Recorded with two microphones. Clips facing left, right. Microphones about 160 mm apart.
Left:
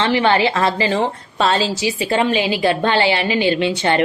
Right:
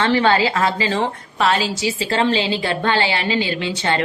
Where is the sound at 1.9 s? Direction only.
15° left (ahead or behind).